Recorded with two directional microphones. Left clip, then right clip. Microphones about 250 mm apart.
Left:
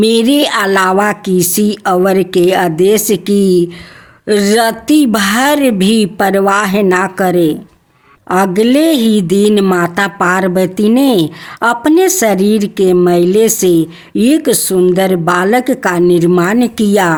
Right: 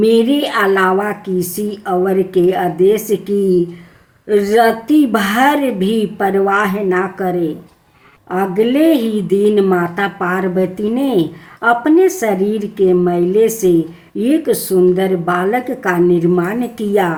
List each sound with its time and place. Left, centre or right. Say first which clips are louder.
0.0 s a woman's voice: left 2 dB; left